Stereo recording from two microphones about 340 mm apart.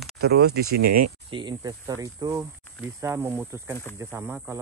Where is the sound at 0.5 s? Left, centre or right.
Right.